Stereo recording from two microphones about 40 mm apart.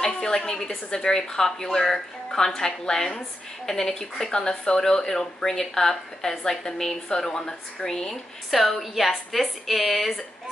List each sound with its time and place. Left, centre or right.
0.0 s a sound: centre
0.8 s speech: centre
8.5 s a woman's voice: centre